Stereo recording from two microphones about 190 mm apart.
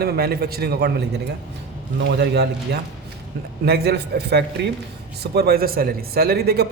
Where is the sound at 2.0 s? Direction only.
65° right (ahead or behind).